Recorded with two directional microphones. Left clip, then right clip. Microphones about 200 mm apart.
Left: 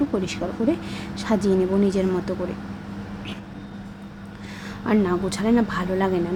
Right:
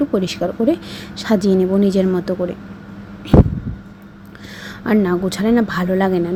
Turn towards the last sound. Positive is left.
turn(degrees=-25)  # may be behind; listen again after turning